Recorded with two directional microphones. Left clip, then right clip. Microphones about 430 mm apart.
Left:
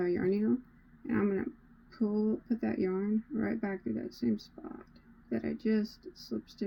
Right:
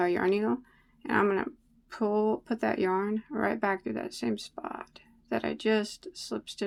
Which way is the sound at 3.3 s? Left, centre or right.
Right.